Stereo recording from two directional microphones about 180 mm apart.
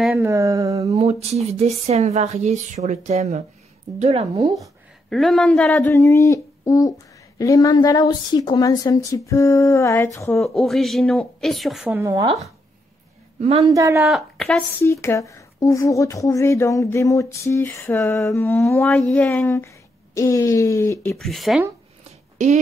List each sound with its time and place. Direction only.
0.2 s speech: 15° right (ahead or behind)
0.9 s speech: 35° right (ahead or behind)
5.1 s speech: centre (ahead or behind)
5.9 s a woman's voice: 15° left (ahead or behind)
10.4 s speech: centre (ahead or behind)
12.0 s speech: 15° right (ahead or behind)
13.4 s speech: 35° right (ahead or behind)
13.7 s speech: 15° right (ahead or behind)
14.0 s speech: centre (ahead or behind)
14.8 s speech: 15° left (ahead or behind)
21.2 s speech: centre (ahead or behind)